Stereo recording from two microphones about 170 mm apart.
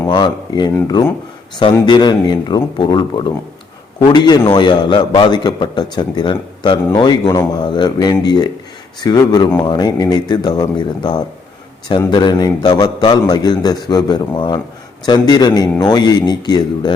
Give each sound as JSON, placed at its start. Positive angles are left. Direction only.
{"t": 0.1, "sound": "a man's voice", "side_deg": 25}